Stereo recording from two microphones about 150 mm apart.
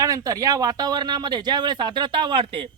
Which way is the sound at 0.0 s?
25° right (ahead or behind).